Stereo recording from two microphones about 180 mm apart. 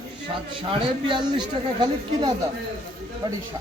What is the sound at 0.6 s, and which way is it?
Speech, 30° right (ahead or behind).